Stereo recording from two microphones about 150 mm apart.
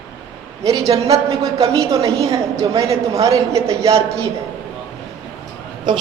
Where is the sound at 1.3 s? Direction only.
25° right (ahead or behind).